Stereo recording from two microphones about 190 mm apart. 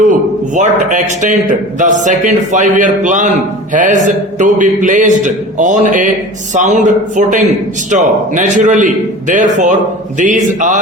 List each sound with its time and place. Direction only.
0.5 s a man's voice: 40° right (ahead or behind)